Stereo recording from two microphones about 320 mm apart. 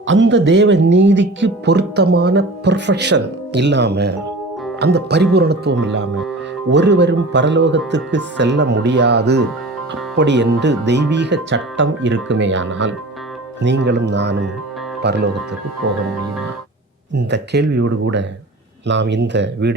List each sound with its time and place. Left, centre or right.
0.1 s speech: right
17.2 s speech: right